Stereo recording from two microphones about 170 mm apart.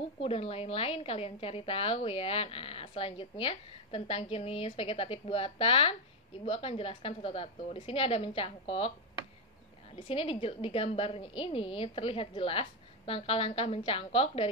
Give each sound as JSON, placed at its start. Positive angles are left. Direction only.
{"t": 0.2, "sound": "a woman's voice", "side_deg": 35}
{"t": 10.0, "sound": "a woman's voice", "side_deg": 35}